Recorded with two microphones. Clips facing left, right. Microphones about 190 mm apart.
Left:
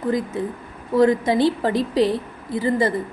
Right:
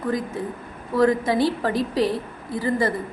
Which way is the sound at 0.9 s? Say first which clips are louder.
Left 2 dB; 25° left (ahead or behind).